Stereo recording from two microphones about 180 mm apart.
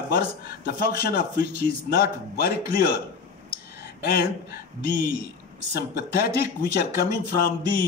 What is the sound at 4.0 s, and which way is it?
Speech, 60° left (ahead or behind).